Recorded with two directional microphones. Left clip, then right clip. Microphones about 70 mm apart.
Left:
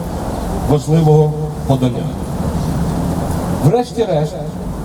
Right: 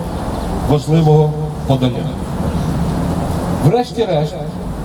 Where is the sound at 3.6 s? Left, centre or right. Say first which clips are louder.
Even; centre.